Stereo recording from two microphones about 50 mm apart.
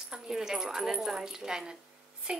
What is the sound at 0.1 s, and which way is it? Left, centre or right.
A woman's voice, centre.